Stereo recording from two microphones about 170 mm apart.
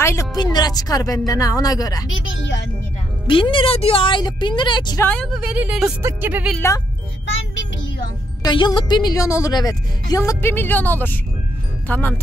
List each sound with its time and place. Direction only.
0.0 s a woman's voice: 15° left (ahead or behind)
2.4 s a woman's voice: 90° left
3.3 s a woman's voice: 30° left (ahead or behind)
5.0 s a woman's voice: 5° left (ahead or behind)
5.3 s a woman's voice: 5° right (ahead or behind)
8.4 s a woman's voice: 25° left (ahead or behind); by 12.2 s 10° left (ahead or behind)